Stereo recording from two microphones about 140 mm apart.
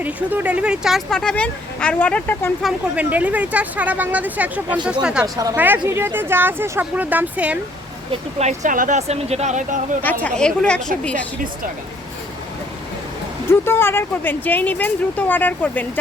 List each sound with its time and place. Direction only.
0.0 s speech: 10° right (ahead or behind); by 2.5 s 10° left (ahead or behind)
2.9 s speech: 10° right (ahead or behind)
5.2 s speech: 25° right (ahead or behind)
5.5 s speech: 15° right (ahead or behind)
8.4 s speech: 60° right (ahead or behind)
10.0 s speech: 10° left (ahead or behind)
13.5 s speech: 15° left (ahead or behind)